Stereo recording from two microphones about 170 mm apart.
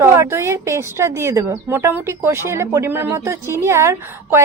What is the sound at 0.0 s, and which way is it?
A woman's voice, 15° right (ahead or behind).